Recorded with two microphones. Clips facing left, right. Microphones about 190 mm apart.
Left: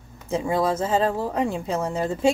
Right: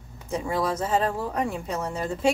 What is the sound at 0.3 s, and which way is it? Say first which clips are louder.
Speech: left 4 dB; 25° left (ahead or behind).